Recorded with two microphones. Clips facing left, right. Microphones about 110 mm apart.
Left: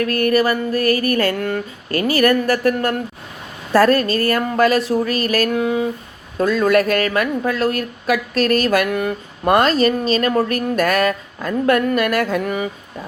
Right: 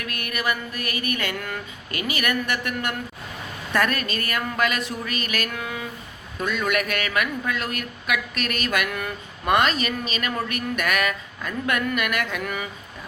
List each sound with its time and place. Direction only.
0.0 s speech: 40° left (ahead or behind)